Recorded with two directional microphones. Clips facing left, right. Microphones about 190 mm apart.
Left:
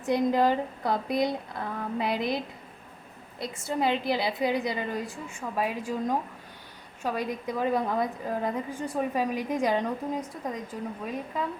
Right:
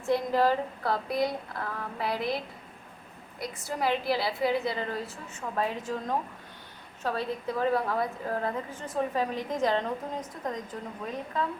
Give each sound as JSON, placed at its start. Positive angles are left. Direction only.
{"t": 0.0, "sound": "speech", "side_deg": 20}
{"t": 3.4, "sound": "a woman's voice", "side_deg": 25}